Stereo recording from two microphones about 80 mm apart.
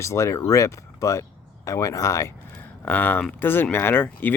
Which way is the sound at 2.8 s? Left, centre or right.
Left.